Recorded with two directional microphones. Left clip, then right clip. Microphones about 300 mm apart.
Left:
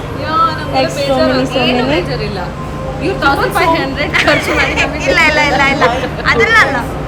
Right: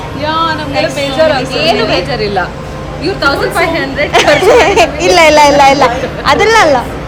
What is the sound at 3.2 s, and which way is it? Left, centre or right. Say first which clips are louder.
A woman's voice: right 1 dB; centre.